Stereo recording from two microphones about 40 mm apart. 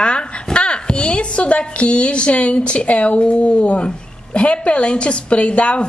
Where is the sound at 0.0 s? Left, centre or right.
Left.